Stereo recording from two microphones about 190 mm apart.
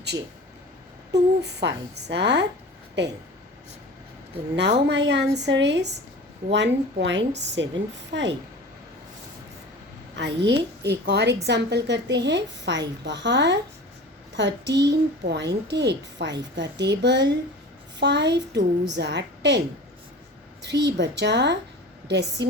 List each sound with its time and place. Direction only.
1.4 s a woman's voice: 65° right (ahead or behind)
4.9 s a woman's voice: 65° right (ahead or behind)
10.2 s a woman's voice: 65° right (ahead or behind)